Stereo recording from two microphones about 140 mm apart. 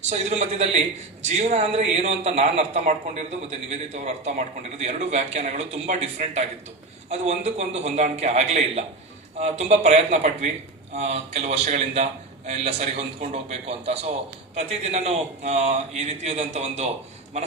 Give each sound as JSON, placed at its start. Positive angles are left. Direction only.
{"t": 0.0, "sound": "a man's voice", "side_deg": -50}